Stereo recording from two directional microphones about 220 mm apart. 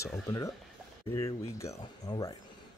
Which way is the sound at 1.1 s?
15° left (ahead or behind).